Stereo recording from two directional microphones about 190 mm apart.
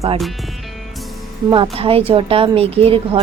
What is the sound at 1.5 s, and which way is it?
A woman's voice, 25° right (ahead or behind).